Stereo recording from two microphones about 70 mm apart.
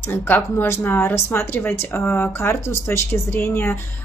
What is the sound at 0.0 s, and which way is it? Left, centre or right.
Speech, left.